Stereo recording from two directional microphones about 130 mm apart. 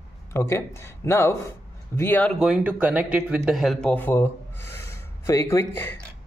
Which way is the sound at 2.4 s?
10° right (ahead or behind).